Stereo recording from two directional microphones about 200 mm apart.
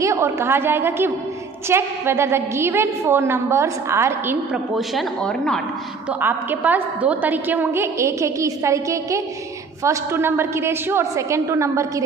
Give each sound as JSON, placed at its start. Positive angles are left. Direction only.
{"t": 0.0, "sound": "a woman's voice", "side_deg": -15}
{"t": 4.7, "sound": "a woman's voice", "side_deg": 0}
{"t": 6.2, "sound": "a woman's voice", "side_deg": -10}